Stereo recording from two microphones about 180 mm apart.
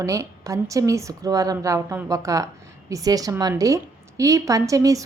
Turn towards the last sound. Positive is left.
turn(degrees=-20)  # may be behind; listen again after turning